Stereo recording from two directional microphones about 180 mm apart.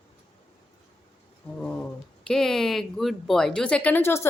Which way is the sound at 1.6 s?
5° left (ahead or behind).